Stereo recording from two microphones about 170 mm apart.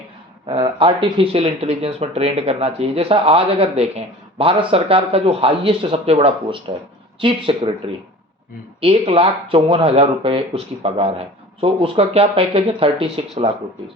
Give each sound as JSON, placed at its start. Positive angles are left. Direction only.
{"t": 0.4, "sound": "speech", "side_deg": -30}
{"t": 8.8, "sound": "speech", "side_deg": -35}